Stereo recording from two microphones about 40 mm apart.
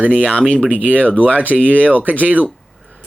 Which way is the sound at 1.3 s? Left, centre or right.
Left.